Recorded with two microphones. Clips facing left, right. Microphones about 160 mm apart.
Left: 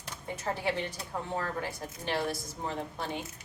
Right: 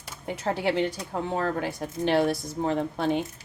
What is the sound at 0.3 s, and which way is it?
A woman's voice, 80° right.